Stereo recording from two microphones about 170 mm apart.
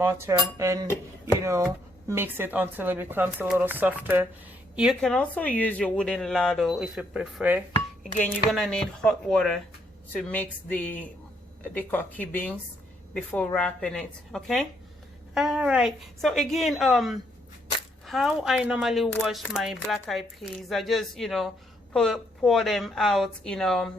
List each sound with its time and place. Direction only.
0.0 s speech: 15° right (ahead or behind)
8.2 s speech: 5° left (ahead or behind)